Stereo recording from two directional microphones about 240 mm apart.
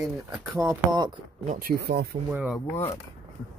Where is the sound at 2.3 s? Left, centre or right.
Centre.